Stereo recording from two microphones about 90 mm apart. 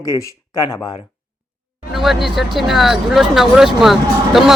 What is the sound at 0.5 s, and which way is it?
Speech, 50° left (ahead or behind).